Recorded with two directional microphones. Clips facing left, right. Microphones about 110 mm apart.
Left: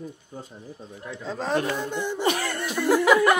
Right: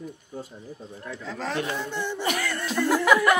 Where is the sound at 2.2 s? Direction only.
30° left (ahead or behind).